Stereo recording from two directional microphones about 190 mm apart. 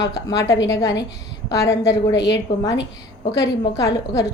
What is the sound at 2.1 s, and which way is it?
Speech, 65° left (ahead or behind).